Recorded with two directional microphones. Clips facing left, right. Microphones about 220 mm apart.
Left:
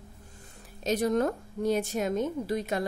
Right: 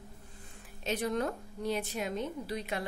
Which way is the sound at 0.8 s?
40° left (ahead or behind).